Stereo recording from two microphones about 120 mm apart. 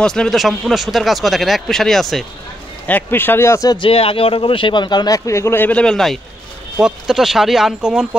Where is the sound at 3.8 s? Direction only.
50° left (ahead or behind).